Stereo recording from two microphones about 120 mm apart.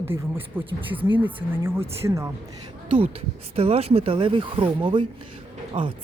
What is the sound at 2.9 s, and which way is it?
A woman's voice, 50° right (ahead or behind).